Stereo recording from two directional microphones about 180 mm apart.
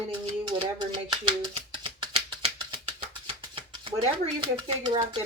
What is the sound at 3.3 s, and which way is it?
Speech, 30° right (ahead or behind).